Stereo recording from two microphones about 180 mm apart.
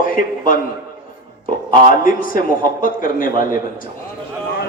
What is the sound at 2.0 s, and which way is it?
A man's voice, 50° left (ahead or behind).